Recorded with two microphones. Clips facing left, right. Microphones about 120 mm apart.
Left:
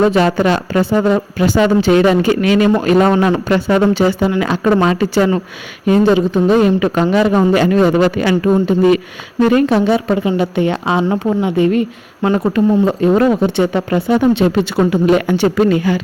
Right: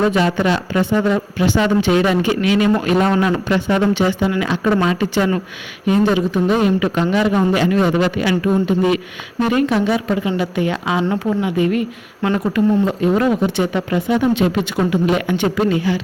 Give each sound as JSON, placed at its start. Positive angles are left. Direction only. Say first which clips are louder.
{"t": 0.3, "sound": "a woman's voice", "louder": "left 3 dB", "side_deg": 45}